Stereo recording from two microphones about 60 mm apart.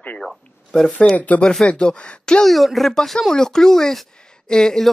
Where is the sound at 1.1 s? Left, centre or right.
Left.